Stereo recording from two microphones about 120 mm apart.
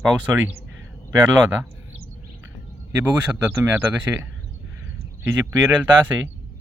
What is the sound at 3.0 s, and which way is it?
Speech, 10° right (ahead or behind).